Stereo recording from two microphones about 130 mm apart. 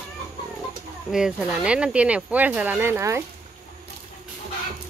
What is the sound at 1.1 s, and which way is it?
Speech, 5° right (ahead or behind).